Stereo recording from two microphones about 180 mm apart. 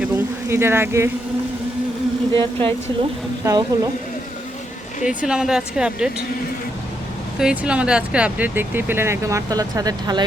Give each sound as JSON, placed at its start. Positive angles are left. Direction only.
{"t": 0.0, "sound": "speech", "side_deg": -15}
{"t": 2.3, "sound": "a woman's voice", "side_deg": -30}
{"t": 5.0, "sound": "speech", "side_deg": -5}
{"t": 7.3, "sound": "speech", "side_deg": -5}